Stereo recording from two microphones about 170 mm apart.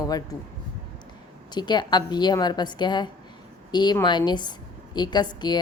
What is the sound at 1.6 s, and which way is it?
A woman's voice, 25° left (ahead or behind).